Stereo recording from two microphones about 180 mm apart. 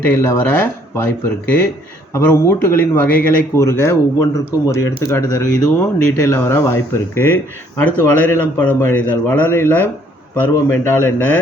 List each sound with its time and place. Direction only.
0.1 s speech: 15° left (ahead or behind)
2.1 s speech: 15° left (ahead or behind)